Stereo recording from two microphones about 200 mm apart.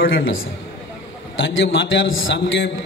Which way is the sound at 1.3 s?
70° left (ahead or behind).